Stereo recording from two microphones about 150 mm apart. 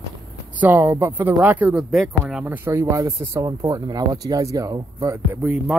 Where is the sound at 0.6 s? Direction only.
10° right (ahead or behind).